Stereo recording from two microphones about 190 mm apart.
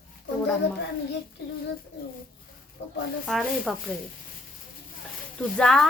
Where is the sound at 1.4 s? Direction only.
60° left (ahead or behind).